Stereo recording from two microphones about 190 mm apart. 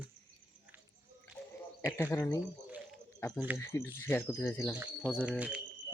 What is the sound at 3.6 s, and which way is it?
Speech, 15° left (ahead or behind).